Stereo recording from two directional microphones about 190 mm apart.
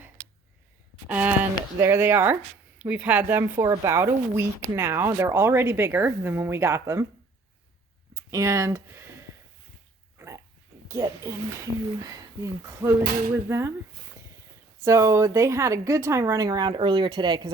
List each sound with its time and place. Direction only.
1.0 s a sound: 5° right (ahead or behind)
1.8 s speech: 10° right (ahead or behind)
8.1 s speech: 15° right (ahead or behind)
10.2 s dog: 15° right (ahead or behind)
10.8 s speech: 15° right (ahead or behind)
14.8 s speech: 15° right (ahead or behind)